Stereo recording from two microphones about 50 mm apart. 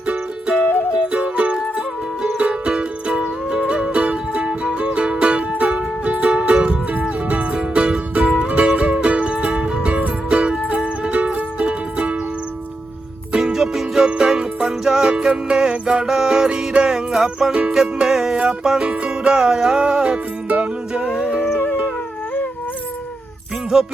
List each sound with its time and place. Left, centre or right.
0.0 s music: right
13.3 s music: centre
17.5 s music: right
17.7 s music: centre
21.4 s howl: left
23.7 s music: centre